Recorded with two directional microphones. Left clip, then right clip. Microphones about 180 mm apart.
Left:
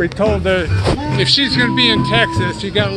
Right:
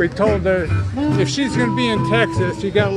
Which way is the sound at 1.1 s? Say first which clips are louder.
Left 7 dB; 60° right (ahead or behind).